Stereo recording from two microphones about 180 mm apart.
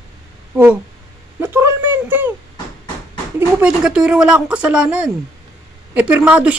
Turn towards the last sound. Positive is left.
turn(degrees=-5)  # may be behind; listen again after turning